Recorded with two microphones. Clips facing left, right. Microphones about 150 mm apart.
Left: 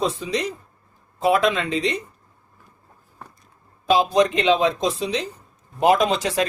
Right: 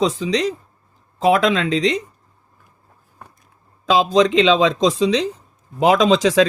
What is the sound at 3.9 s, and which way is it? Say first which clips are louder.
Speech: right 3 dB; 90° right.